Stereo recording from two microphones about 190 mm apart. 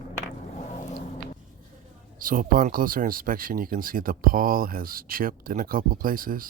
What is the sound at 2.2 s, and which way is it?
Speech, 45° right (ahead or behind).